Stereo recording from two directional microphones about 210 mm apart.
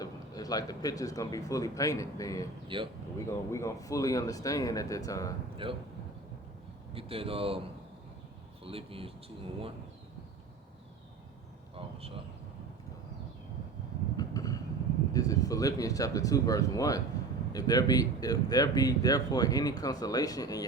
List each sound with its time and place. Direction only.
0.0 s speech: 15° left (ahead or behind)
2.7 s speech: 25° right (ahead or behind)
3.2 s speech: 15° left (ahead or behind)
5.6 s speech: 25° right (ahead or behind)
6.9 s speech: 25° right (ahead or behind)
8.6 s speech: 25° right (ahead or behind)
11.7 s a sound: 25° right (ahead or behind)
14.2 s vehicle: 15° left (ahead or behind)
15.1 s speech: 15° left (ahead or behind)